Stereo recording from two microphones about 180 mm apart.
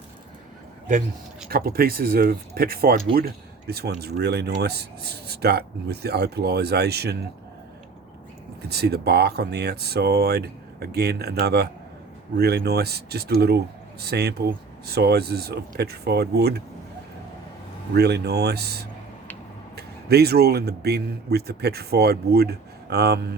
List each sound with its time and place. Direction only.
1.5 s speech: 55° right (ahead or behind)
8.7 s speech: 65° right (ahead or behind)
17.9 s speech: 65° right (ahead or behind)